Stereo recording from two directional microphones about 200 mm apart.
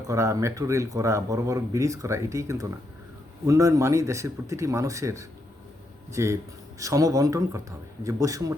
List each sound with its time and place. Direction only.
0.1 s speech: 15° right (ahead or behind)